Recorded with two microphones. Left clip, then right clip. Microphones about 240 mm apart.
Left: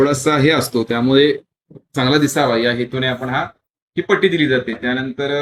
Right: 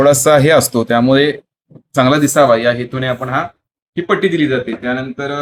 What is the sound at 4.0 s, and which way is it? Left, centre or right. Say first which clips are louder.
Speech: right 1 dB; centre.